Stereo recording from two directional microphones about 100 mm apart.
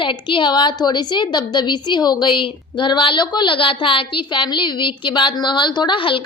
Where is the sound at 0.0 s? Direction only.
55° left (ahead or behind).